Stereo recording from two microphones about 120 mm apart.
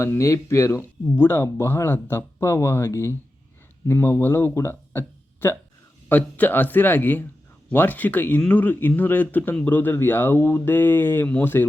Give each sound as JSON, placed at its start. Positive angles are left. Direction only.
{"t": 0.0, "sound": "speech", "side_deg": 25}